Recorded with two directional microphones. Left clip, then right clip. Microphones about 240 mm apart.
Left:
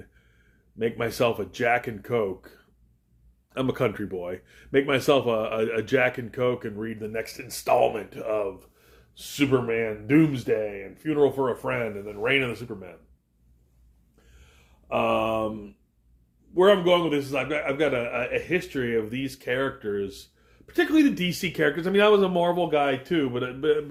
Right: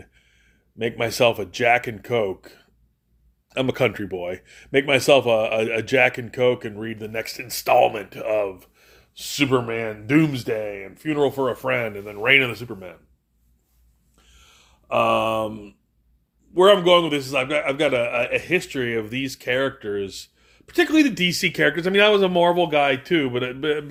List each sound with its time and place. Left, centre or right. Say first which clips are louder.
0.8 s speech: right 5 dB; right
14.3 s a sound: right 7 dB; right
16.6 s speech: right 5 dB; right